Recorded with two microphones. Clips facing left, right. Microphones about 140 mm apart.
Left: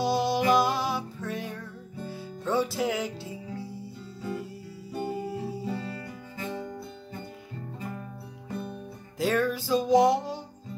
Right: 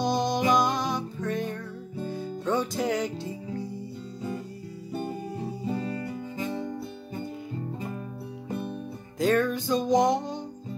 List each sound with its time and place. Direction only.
0.0 s music: 5° left (ahead or behind)
5.7 s music: 20° right (ahead or behind)
8.5 s music: 15° right (ahead or behind)
9.2 s music: 5° left (ahead or behind)